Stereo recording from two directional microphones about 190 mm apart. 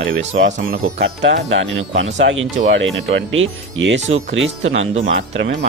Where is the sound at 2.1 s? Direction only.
70° right (ahead or behind).